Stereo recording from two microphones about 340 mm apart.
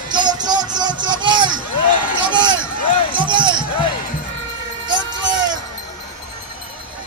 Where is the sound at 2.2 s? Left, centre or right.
Centre.